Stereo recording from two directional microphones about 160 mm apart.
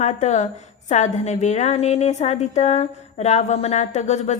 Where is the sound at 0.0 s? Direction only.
45° left (ahead or behind).